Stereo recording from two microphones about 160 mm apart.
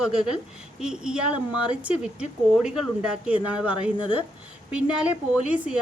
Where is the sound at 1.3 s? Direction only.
30° left (ahead or behind).